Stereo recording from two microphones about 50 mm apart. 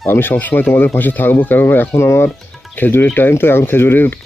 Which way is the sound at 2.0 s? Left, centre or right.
Left.